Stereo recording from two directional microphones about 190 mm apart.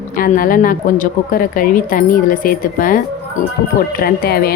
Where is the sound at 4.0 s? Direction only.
50° left (ahead or behind).